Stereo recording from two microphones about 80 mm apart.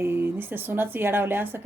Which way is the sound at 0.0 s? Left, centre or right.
Right.